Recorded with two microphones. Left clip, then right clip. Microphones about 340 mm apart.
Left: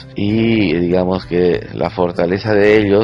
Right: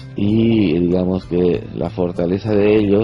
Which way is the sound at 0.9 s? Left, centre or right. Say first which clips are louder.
Left 3 dB; left.